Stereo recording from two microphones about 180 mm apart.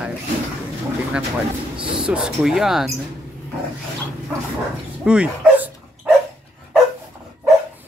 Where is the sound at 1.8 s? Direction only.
30° right (ahead or behind).